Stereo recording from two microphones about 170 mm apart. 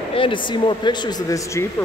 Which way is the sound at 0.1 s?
30° left (ahead or behind).